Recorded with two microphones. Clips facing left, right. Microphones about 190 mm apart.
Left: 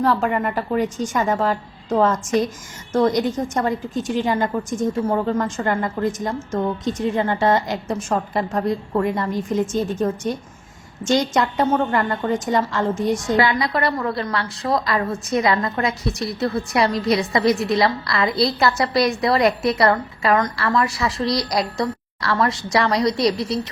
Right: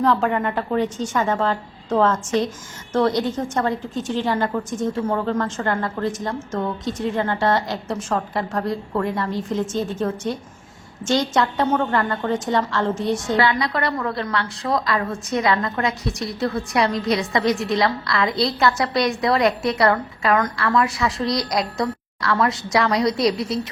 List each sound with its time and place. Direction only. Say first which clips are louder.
0.0 s a woman's voice: even; 5° left (ahead or behind)